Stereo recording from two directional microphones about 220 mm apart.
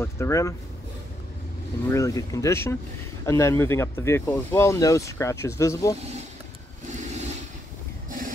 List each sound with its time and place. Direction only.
0.0 s speech: 15° left (ahead or behind)
1.9 s speech: 15° left (ahead or behind)
6.9 s vehicle: 30° right (ahead or behind)